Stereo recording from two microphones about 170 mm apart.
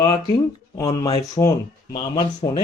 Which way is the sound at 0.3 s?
20° left (ahead or behind).